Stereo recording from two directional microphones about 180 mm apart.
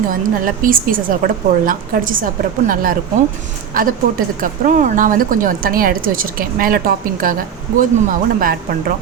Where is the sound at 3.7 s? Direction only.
50° right (ahead or behind).